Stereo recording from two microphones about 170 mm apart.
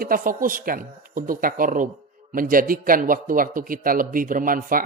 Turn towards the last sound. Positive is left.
turn(degrees=-55)  # may be behind; listen again after turning